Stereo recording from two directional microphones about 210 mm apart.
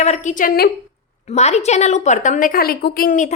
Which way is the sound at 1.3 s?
30° left (ahead or behind).